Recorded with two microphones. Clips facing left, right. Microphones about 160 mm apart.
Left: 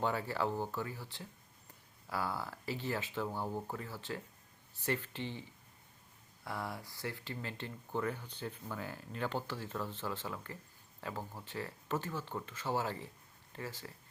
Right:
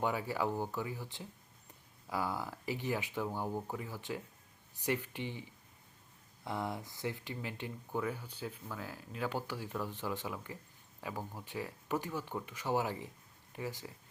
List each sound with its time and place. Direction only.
0.0 s speech: 10° right (ahead or behind)